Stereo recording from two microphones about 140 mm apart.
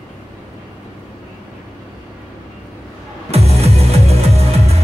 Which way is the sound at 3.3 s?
50° right (ahead or behind).